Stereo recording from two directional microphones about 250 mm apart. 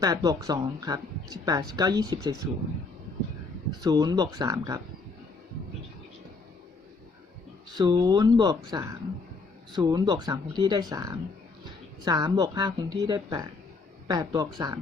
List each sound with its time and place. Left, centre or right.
0.0 s speech: centre
3.8 s speech: centre
7.8 s speech: centre